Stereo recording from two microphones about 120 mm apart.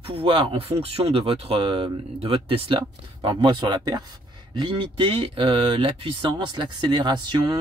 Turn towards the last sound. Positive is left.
turn(degrees=-40)  # may be behind; listen again after turning